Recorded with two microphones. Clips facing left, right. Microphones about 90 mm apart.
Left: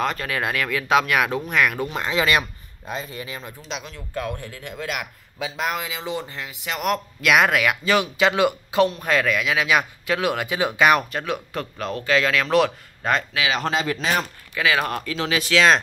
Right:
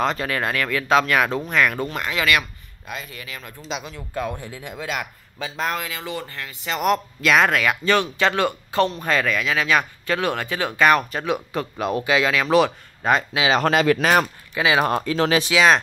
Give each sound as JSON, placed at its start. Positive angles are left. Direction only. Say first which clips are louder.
{"t": 0.3, "sound": "speech", "louder": "right 1 dB", "side_deg": 5}
{"t": 2.0, "sound": "speech", "louder": "left 2 dB", "side_deg": 20}
{"t": 3.6, "sound": "speech", "louder": "right 3 dB", "side_deg": -5}
{"t": 6.6, "sound": "speech", "louder": "right 3 dB", "side_deg": 0}
{"t": 11.1, "sound": "speech", "louder": "right 3 dB", "side_deg": 0}
{"t": 13.6, "sound": "speech", "louder": "right 6 dB", "side_deg": -65}
{"t": 14.5, "sound": "speech", "louder": "right 3 dB", "side_deg": -20}
{"t": 15.1, "sound": "speech", "louder": "right 5 dB", "side_deg": -40}
{"t": 15.5, "sound": "speech", "louder": "left 1 dB", "side_deg": -5}